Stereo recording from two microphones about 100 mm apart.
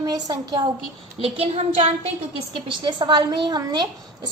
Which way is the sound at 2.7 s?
50° right (ahead or behind).